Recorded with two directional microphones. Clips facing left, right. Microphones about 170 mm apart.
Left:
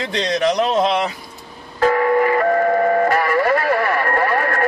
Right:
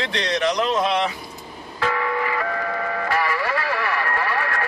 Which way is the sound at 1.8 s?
45° left (ahead or behind).